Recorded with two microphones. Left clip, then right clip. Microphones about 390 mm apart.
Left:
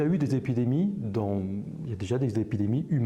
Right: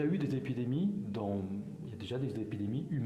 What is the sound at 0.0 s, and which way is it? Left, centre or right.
Speech, left.